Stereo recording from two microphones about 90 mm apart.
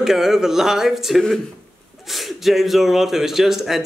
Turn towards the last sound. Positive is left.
turn(degrees=-5)  # may be behind; listen again after turning